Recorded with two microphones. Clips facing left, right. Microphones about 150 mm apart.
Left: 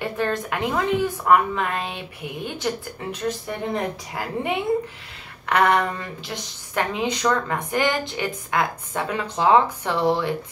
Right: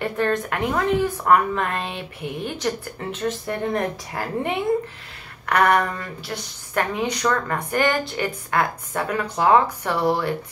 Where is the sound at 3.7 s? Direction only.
5° left (ahead or behind).